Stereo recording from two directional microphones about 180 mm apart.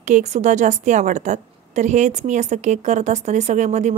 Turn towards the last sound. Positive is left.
turn(degrees=-40)  # may be behind; listen again after turning